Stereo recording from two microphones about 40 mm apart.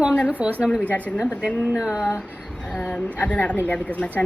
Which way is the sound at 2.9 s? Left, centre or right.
Left.